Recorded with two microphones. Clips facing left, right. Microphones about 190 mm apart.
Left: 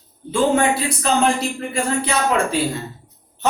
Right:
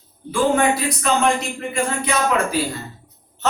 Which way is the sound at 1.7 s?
30° left (ahead or behind).